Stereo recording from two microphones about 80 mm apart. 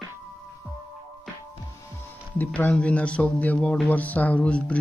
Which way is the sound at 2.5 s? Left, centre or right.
Centre.